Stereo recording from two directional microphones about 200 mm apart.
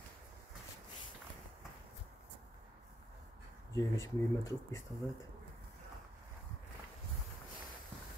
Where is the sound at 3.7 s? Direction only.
15° left (ahead or behind).